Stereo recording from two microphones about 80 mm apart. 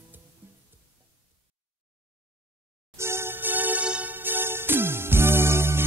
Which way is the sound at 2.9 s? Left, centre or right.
Right.